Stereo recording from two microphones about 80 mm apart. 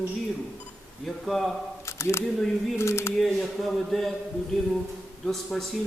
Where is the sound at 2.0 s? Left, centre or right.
Left.